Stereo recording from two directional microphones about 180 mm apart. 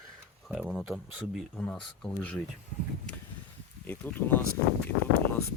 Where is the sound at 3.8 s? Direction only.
10° left (ahead or behind).